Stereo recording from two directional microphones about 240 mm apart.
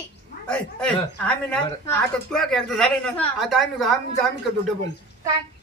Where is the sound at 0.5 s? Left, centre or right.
Centre.